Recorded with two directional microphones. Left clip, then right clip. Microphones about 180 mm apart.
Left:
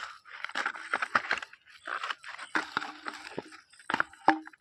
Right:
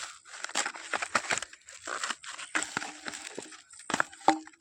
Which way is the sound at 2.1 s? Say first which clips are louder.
Even; 15° right (ahead or behind).